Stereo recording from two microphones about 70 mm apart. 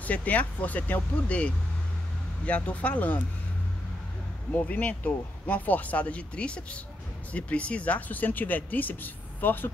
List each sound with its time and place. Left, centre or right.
0.0 s speech: left
4.6 s speech: left